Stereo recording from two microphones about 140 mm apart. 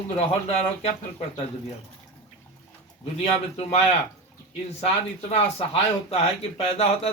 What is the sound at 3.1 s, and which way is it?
Speech, 45° left (ahead or behind).